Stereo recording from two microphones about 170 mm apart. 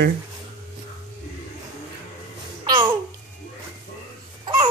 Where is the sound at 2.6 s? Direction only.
30° right (ahead or behind).